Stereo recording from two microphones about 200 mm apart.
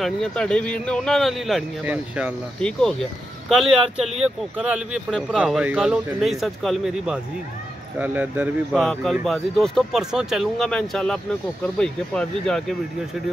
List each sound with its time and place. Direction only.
0.0 s speech: 5° left (ahead or behind)